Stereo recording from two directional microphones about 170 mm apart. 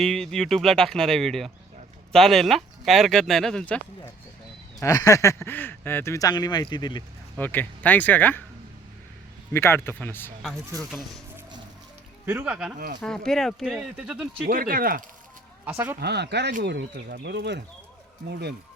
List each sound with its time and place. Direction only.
0.0 s speech: 5° left (ahead or behind)
4.8 s speech: 20° left (ahead or behind)
7.3 s speech: 10° left (ahead or behind)
9.5 s speech: 15° left (ahead or behind)
10.7 s speech: 20° right (ahead or behind)
12.2 s speech: 10° right (ahead or behind)
14.4 s speech: 55° right (ahead or behind)
15.6 s speech: 10° right (ahead or behind)
16.0 s speech: 75° right (ahead or behind)
18.3 s speech: 75° right (ahead or behind)